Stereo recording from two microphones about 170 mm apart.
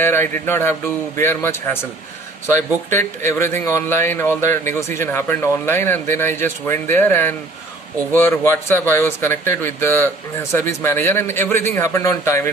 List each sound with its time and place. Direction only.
0.0 s speech: 15° left (ahead or behind)
2.9 s speech: 15° left (ahead or behind)